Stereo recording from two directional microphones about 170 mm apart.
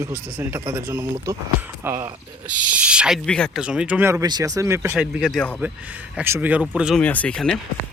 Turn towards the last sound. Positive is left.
turn(degrees=5)  # may be behind; listen again after turning